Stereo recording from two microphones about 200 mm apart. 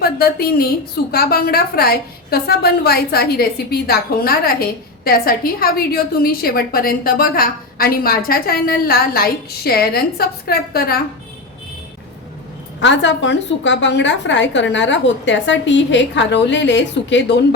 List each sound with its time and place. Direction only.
0.0 s a woman's voice: 50° left (ahead or behind)
12.8 s a woman's voice: 65° left (ahead or behind)